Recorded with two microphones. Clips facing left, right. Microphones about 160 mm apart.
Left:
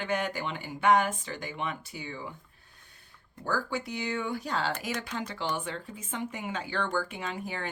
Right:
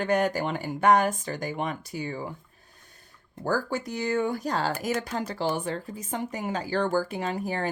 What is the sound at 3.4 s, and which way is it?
Speech, 40° right (ahead or behind).